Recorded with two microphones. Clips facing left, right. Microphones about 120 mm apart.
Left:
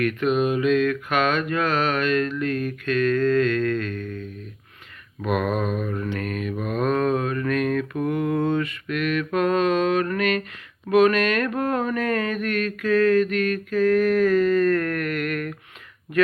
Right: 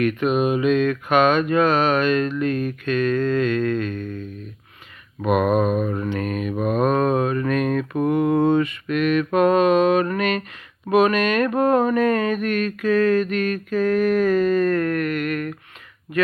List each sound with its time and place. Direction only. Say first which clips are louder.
0.0 s mantra: right 2 dB; 15° right (ahead or behind)
5.2 s mantra: right 5 dB; 20° right (ahead or behind); by 15.5 s centre (ahead or behind)